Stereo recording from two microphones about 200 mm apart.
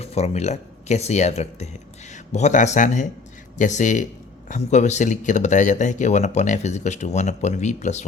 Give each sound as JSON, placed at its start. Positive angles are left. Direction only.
{"t": 0.0, "sound": "speech", "side_deg": 30}